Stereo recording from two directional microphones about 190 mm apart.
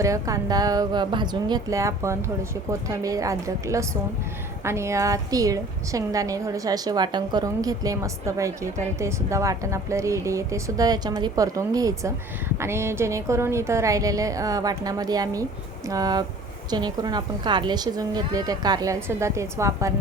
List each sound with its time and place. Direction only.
0.0 s a woman's voice: 15° right (ahead or behind)